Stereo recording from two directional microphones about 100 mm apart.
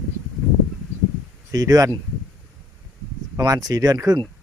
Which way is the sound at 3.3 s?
35° right (ahead or behind).